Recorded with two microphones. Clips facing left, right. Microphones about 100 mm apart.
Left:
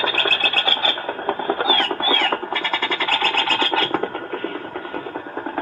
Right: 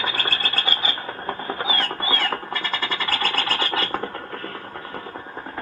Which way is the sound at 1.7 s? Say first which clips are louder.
Left 5 dB; 55° left (ahead or behind).